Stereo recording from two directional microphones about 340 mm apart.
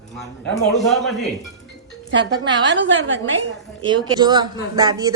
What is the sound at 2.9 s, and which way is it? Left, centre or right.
Speech, right.